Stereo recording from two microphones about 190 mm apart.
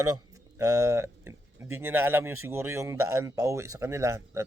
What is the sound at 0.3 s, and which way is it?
Speech, 15° right (ahead or behind).